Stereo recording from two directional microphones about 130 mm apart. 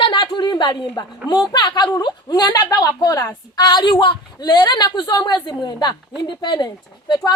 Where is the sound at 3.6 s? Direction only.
35° left (ahead or behind).